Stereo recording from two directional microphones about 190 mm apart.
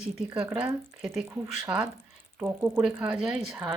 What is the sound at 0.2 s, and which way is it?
Speech, 10° right (ahead or behind).